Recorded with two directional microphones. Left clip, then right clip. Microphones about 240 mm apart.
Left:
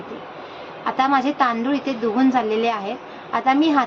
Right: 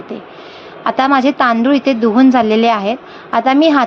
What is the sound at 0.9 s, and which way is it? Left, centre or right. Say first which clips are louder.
A woman's voice: right 7 dB; right.